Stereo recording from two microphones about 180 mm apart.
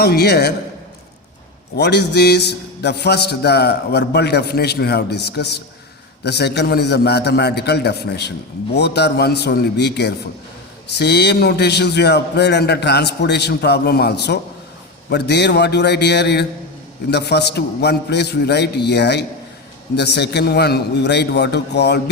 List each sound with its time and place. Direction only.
0.0 s a man's voice: 60° left (ahead or behind)
1.7 s a man's voice: 65° left (ahead or behind)